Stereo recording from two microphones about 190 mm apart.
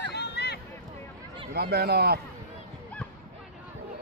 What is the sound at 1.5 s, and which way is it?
Speech, 55° right (ahead or behind).